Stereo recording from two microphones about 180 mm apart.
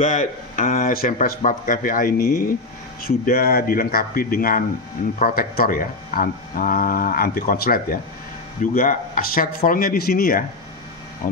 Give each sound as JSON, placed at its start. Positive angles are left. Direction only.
{"t": 0.0, "sound": "speech", "side_deg": 45}